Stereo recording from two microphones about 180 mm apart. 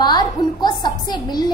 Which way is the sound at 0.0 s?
25° left (ahead or behind).